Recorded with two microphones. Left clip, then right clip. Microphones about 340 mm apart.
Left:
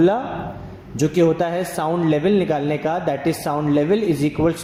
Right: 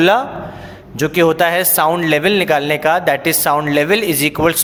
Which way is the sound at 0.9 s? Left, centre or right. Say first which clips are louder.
Right 5 dB; right.